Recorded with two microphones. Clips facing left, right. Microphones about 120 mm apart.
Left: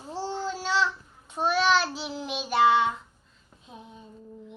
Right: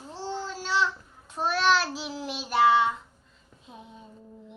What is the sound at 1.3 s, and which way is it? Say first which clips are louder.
Child singing: left 1 dB; centre (ahead or behind).